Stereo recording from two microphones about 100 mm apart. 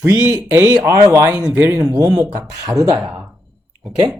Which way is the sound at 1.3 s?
15° right (ahead or behind).